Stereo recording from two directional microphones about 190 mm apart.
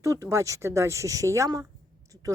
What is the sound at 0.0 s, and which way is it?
Speech, 15° right (ahead or behind).